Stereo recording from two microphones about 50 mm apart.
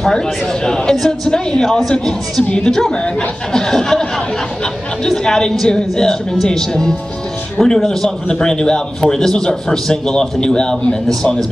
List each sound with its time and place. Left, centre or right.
0.1 s a man's voice: centre